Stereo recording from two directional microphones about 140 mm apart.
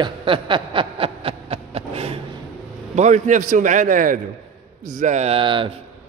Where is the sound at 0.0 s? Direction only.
35° right (ahead or behind).